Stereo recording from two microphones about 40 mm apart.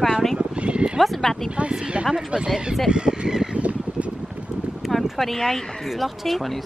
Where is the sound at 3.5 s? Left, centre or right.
Right.